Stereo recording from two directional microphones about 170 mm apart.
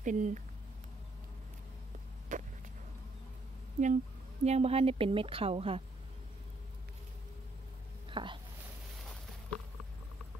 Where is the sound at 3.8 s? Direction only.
45° right (ahead or behind).